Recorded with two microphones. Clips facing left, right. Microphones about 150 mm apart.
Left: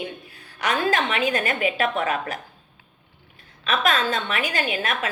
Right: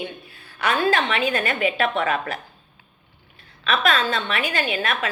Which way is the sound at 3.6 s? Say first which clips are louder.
Right 1 dB; 45° left (ahead or behind).